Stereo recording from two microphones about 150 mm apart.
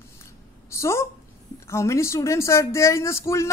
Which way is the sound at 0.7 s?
20° left (ahead or behind).